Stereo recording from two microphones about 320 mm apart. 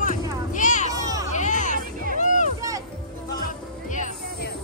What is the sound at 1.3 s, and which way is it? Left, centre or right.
Hubbub, left.